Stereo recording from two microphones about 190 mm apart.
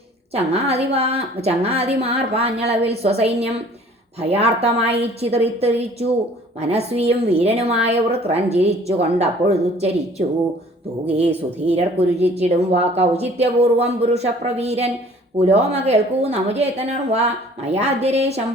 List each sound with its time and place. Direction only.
0.3 s a woman's voice: 35° right (ahead or behind)